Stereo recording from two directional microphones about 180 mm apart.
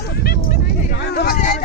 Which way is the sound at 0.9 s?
65° left (ahead or behind).